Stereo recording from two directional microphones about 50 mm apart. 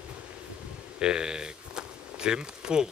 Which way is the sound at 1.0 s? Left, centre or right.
Centre.